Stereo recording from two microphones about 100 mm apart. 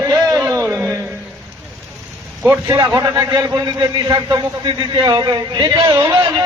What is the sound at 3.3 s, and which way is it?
A man's voice, 45° right (ahead or behind).